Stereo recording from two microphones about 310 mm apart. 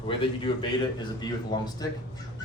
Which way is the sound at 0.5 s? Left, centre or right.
Centre.